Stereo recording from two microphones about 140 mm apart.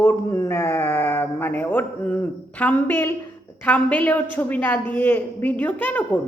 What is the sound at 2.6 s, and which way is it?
A woman's voice, 10° left (ahead or behind).